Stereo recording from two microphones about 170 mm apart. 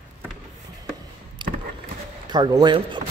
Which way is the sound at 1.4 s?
25° right (ahead or behind).